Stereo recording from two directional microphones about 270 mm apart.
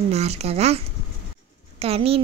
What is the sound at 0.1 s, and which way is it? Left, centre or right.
Speech, right.